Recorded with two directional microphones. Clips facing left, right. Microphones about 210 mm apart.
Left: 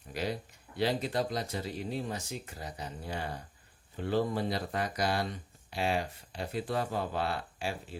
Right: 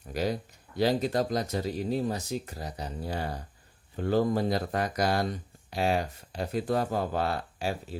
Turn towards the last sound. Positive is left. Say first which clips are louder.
# right 5 dB
turn(degrees=-40)  # may be behind; listen again after turning